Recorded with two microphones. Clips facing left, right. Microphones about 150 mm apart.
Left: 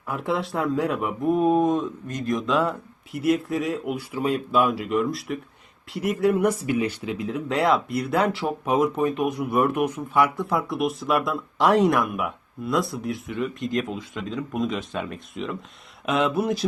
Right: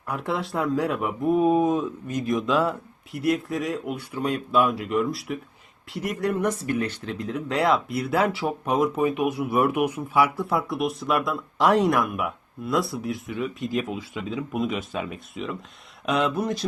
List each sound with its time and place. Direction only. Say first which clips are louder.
0.1 s speech: left 1 dB; centre (ahead or behind)